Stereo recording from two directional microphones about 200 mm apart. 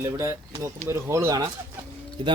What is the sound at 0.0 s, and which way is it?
A man's voice, 15° right (ahead or behind).